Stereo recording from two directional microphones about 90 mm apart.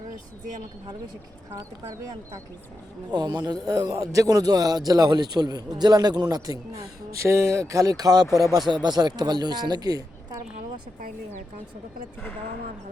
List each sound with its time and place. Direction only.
3.1 s a man's voice: 50° right (ahead or behind)